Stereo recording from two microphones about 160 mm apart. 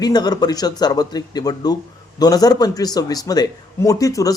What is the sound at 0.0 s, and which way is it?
A man's voice, 25° left (ahead or behind).